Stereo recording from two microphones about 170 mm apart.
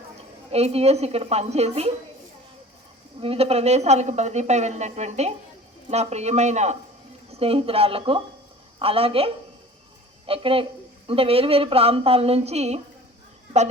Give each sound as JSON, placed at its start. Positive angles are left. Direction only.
{"t": 0.5, "sound": "speech", "side_deg": -35}
{"t": 3.2, "sound": "speech", "side_deg": -35}